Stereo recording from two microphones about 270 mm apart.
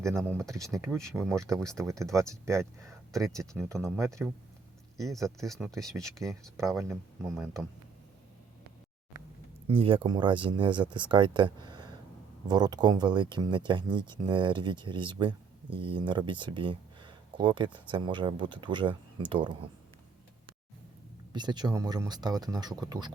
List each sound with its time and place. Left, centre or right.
0.2 s speech: centre
0.4 s speech: centre
4.9 s speech: centre
9.6 s speech: centre
21.3 s speech: centre